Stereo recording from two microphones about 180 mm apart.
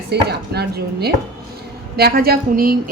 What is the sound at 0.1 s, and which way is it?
A woman's voice, 65° right (ahead or behind).